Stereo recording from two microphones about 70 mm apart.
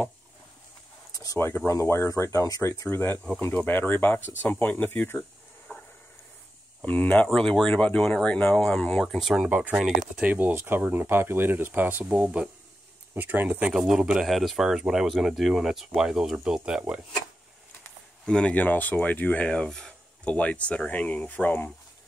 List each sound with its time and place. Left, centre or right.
1.1 s a sound: left
1.7 s speech: left
2.9 s speech: left
5.7 s stir: centre
6.8 s speech: left
9.0 s speech: centre
9.5 s speech: centre
10.5 s speech: right
13.7 s speech: centre
18.2 s speech: centre
19.5 s a sound: centre
20.3 s speech: centre